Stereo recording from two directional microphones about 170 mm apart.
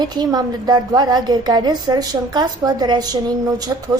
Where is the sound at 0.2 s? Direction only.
25° right (ahead or behind).